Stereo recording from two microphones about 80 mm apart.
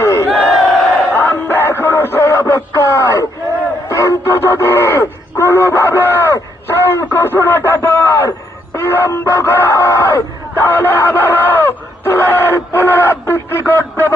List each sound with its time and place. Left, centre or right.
0.0 s battle cry: left
0.3 s battle cry: centre
1.1 s music: left
3.8 s a sound: left
8.7 s chicken: left